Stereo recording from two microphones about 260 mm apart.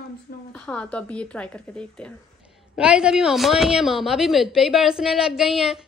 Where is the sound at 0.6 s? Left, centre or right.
Centre.